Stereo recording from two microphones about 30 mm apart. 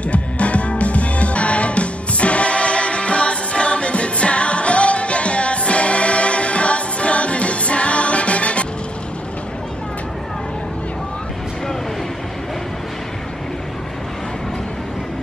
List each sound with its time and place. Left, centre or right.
0.1 s music: left